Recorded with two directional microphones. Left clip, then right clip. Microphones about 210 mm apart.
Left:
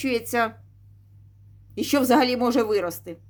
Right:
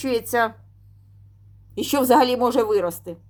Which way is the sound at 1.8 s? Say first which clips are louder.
Right 3 dB; centre (ahead or behind).